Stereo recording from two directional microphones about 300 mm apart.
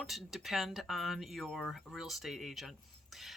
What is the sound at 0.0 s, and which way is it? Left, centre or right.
Speech, centre.